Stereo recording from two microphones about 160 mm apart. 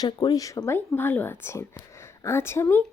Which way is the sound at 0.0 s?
25° left (ahead or behind).